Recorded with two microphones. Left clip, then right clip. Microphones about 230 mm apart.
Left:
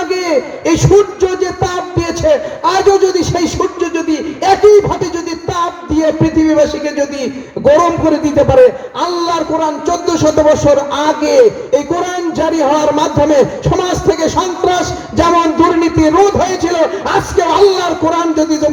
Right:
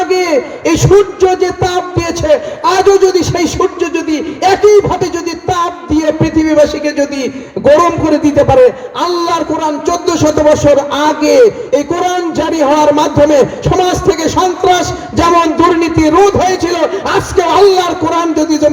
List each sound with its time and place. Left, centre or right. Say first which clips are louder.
0.1 s a man's voice: right 3 dB; right